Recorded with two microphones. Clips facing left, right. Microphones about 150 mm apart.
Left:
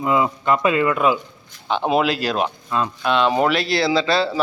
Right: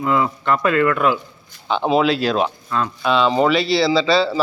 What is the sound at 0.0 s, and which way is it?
Speech, 15° left (ahead or behind).